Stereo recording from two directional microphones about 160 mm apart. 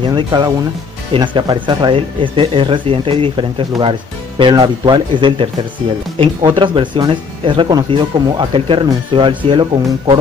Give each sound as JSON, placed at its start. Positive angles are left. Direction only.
{"t": 0.0, "sound": "speech", "side_deg": -25}